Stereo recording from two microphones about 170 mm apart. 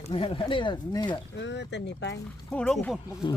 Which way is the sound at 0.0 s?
35° left (ahead or behind).